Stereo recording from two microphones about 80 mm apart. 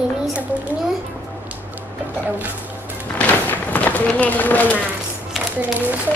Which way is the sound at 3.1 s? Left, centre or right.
Left.